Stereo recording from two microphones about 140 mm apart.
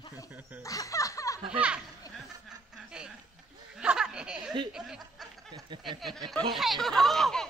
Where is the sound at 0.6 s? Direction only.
25° left (ahead or behind).